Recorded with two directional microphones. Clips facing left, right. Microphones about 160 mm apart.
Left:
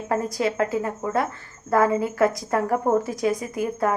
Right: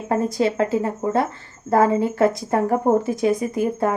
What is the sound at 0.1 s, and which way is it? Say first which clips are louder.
Speech: right 4 dB; 25° right (ahead or behind).